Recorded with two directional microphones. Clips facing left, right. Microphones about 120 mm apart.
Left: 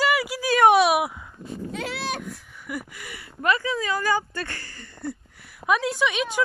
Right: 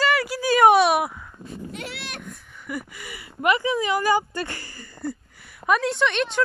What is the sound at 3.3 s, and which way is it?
A woman's voice, 20° right (ahead or behind).